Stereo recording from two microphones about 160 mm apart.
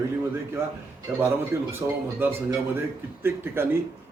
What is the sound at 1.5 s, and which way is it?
Speech, 15° right (ahead or behind).